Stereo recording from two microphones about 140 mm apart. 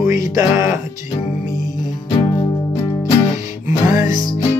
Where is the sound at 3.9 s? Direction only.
70° left (ahead or behind).